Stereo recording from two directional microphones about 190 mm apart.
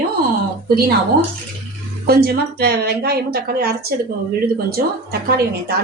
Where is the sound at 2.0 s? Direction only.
55° right (ahead or behind).